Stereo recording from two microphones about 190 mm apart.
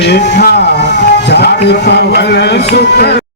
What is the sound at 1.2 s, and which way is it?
Speech, 60° left (ahead or behind).